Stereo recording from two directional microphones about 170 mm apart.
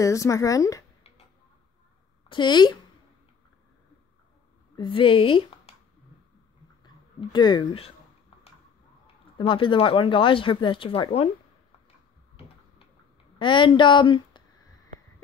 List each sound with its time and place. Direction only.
0.0 s speech: 20° left (ahead or behind)
2.2 s speech: 25° left (ahead or behind)
4.7 s a woman's voice: 30° left (ahead or behind)
6.8 s speech: 25° left (ahead or behind)
9.0 s speech: 30° left (ahead or behind)
13.4 s speech: 30° left (ahead or behind)